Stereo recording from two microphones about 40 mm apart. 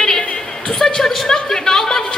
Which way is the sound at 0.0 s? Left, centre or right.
Centre.